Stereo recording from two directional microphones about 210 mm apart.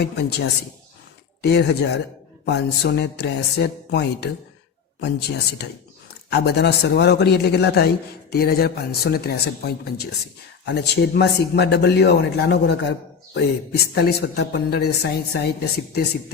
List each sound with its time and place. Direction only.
0.0 s speech: 50° left (ahead or behind)
1.4 s speech: 50° left (ahead or behind)
6.3 s speech: 50° left (ahead or behind)